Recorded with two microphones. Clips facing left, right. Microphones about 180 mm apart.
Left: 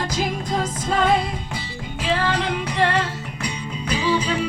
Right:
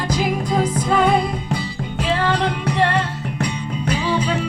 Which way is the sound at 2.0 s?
60° right (ahead or behind).